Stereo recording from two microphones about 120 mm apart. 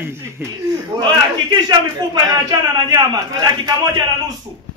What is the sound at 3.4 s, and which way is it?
Speech, 35° right (ahead or behind).